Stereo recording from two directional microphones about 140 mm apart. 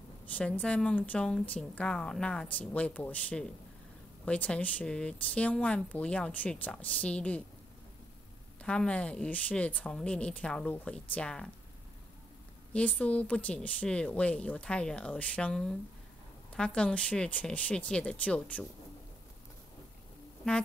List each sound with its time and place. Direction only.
0.3 s speech: 10° left (ahead or behind)
8.6 s speech: 10° left (ahead or behind)
12.7 s speech: 10° left (ahead or behind)
20.4 s speech: 5° left (ahead or behind)